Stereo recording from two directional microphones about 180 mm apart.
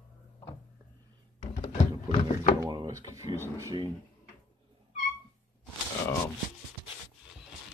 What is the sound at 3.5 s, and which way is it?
Speech, 20° right (ahead or behind).